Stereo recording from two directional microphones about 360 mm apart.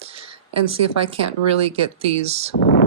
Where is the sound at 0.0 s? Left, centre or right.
Centre.